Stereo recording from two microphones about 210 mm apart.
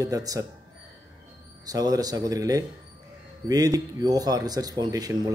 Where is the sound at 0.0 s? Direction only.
15° right (ahead or behind).